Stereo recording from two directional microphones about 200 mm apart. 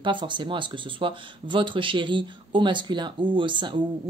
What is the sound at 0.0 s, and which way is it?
Speech, 25° right (ahead or behind).